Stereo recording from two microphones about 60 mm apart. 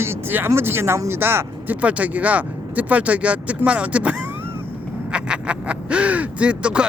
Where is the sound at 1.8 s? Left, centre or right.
Right.